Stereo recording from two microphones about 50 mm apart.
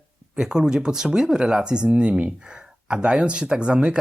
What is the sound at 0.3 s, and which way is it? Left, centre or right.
Speech, centre.